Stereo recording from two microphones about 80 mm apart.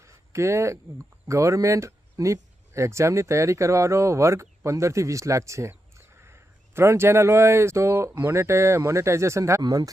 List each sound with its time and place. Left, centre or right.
0.0 s a sound: right
1.3 s speech: right
9.6 s speech: right